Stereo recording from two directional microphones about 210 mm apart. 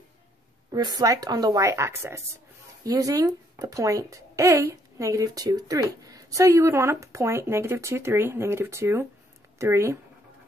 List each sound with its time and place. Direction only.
0.7 s speech: 20° right (ahead or behind)